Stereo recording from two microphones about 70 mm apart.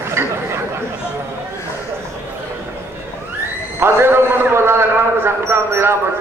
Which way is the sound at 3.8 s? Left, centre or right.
Right.